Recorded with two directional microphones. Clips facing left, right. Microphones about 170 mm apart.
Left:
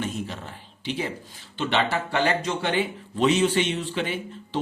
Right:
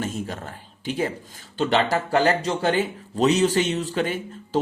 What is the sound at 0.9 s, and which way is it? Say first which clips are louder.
Speech: right 4 dB; 45° right (ahead or behind).